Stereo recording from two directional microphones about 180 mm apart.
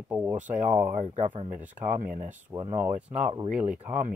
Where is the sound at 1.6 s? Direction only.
10° right (ahead or behind).